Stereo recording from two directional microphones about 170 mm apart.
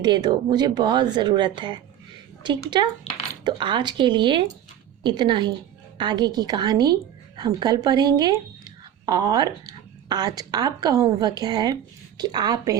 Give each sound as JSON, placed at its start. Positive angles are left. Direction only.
{"t": 0.0, "sound": "a woman's voice", "side_deg": -25}